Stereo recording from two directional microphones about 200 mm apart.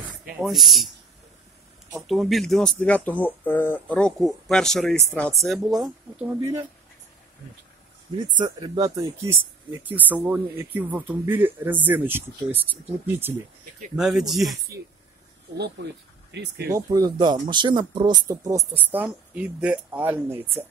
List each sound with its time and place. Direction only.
0.4 s speech: centre (ahead or behind)
2.0 s speech: centre (ahead or behind)
6.1 s speech: 10° right (ahead or behind)
8.4 s speech: 20° right (ahead or behind); by 14.6 s centre (ahead or behind)
15.5 s speech: 55° right (ahead or behind)
16.7 s speech: 20° right (ahead or behind)